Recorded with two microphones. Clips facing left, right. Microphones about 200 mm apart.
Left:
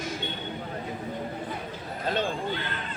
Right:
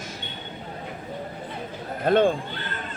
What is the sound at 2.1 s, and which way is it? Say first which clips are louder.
Speech: right 9 dB; 55° right (ahead or behind).